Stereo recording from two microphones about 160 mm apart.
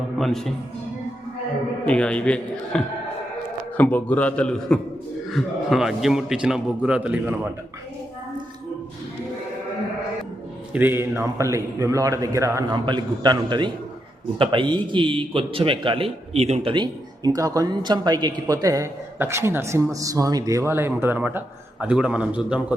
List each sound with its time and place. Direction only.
0.2 s a man's voice: centre (ahead or behind)
1.8 s a man's voice: 5° left (ahead or behind)
10.7 s a man's voice: 10° right (ahead or behind)
12.7 s a man's voice: 30° right (ahead or behind); by 22.6 s 5° right (ahead or behind)